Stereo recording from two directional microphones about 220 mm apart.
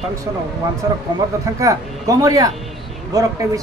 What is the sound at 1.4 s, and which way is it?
Speech, 15° right (ahead or behind).